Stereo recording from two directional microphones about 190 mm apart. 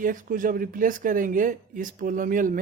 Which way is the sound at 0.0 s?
45° right (ahead or behind).